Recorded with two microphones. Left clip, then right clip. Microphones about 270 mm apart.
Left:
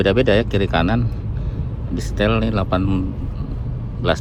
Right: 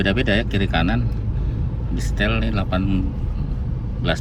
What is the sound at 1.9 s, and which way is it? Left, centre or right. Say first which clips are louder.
Speech: left 4 dB; centre.